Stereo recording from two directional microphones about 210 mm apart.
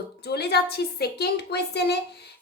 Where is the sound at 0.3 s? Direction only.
50° left (ahead or behind).